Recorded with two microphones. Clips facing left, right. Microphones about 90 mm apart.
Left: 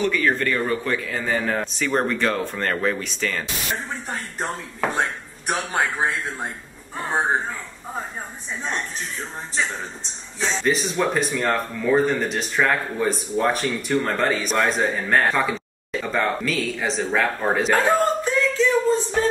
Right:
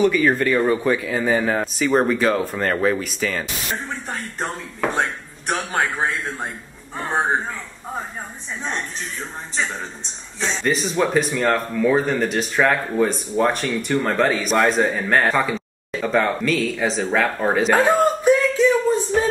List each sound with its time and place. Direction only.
0.0 s speech: 10° right (ahead or behind)
5.5 s speech: centre (ahead or behind)
10.4 s speech: centre (ahead or behind)
17.7 s a sound: 15° right (ahead or behind)